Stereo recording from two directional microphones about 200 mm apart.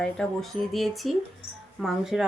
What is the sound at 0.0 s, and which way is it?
Speech, 5° left (ahead or behind).